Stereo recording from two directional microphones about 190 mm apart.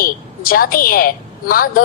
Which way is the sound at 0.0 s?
50° left (ahead or behind).